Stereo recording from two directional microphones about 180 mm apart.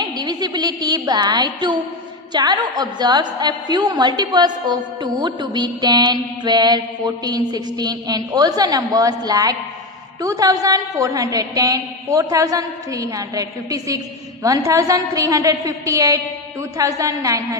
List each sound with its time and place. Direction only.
0.0 s a woman's voice: 25° right (ahead or behind)